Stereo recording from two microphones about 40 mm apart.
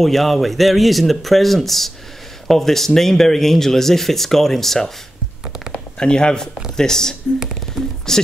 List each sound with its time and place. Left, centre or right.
0.0 s speech: centre
5.7 s a sound: left
6.8 s speech: centre